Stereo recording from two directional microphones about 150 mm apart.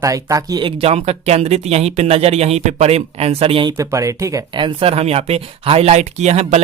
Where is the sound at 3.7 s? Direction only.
20° right (ahead or behind).